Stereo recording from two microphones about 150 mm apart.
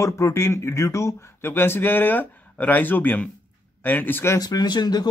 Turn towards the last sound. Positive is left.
turn(degrees=25)  # may be behind; listen again after turning